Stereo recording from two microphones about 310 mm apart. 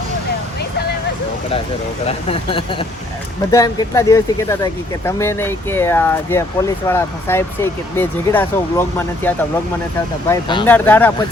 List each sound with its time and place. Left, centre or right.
2.0 s speech: centre